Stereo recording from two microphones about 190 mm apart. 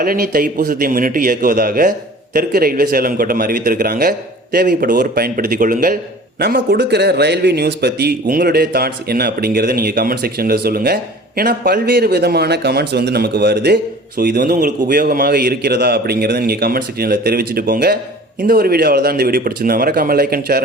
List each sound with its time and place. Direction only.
0.0 s speech: 50° right (ahead or behind)